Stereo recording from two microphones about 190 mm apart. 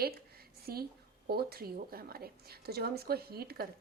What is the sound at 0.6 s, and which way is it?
A woman's voice, 55° right (ahead or behind).